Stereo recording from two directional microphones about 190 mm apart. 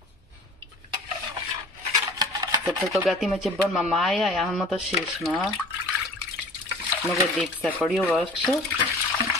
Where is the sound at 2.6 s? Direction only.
Centre (ahead or behind).